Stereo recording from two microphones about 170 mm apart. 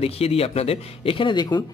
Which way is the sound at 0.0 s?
35° left (ahead or behind).